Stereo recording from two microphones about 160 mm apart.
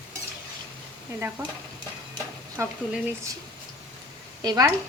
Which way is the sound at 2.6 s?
15° right (ahead or behind).